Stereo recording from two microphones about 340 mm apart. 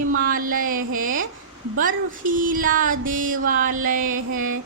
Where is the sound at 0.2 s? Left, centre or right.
Right.